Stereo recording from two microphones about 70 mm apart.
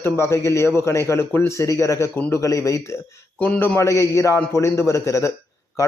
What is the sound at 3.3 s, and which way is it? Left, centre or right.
Speech, left.